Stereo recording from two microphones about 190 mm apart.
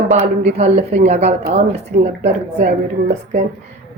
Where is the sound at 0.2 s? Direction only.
35° right (ahead or behind).